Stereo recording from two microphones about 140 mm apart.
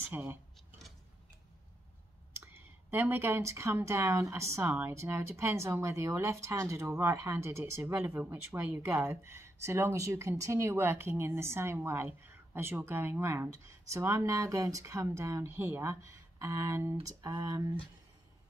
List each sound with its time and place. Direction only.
0.1 s speech: 15° right (ahead or behind)
2.4 s speech: 15° right (ahead or behind)